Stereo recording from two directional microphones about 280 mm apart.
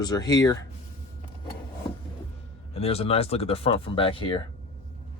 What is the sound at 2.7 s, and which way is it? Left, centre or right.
Speech, left.